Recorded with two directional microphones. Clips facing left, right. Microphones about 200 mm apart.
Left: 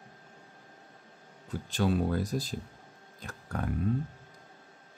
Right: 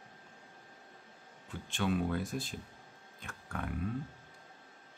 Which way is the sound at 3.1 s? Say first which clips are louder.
Left 5 dB; 40° left (ahead or behind).